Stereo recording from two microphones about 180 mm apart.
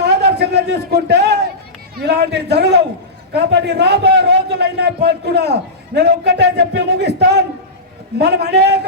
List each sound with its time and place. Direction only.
0.0 s a man's voice: 65° right (ahead or behind)